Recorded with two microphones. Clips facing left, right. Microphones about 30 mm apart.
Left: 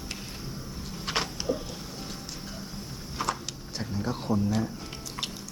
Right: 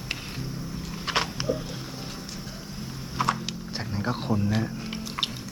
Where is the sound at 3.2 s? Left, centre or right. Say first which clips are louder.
Right 5 dB; centre.